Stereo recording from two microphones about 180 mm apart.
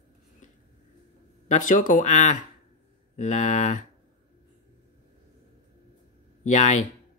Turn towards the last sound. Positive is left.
turn(degrees=40)  # may be behind; listen again after turning